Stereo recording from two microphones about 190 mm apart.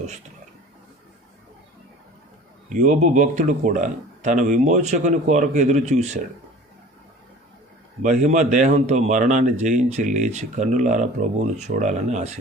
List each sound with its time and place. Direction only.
2.6 s a man's voice: 40° right (ahead or behind)
8.0 s a man's voice: 40° right (ahead or behind)